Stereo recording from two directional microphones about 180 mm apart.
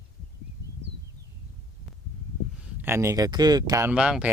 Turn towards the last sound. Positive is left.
turn(degrees=-5)  # may be behind; listen again after turning